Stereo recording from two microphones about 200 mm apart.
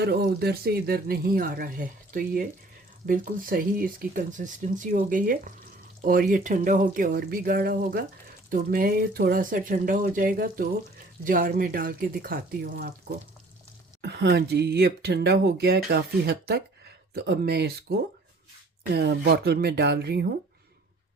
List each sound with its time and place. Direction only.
0.0 s speech: 55° right (ahead or behind)
14.0 s speech: 55° right (ahead or behind)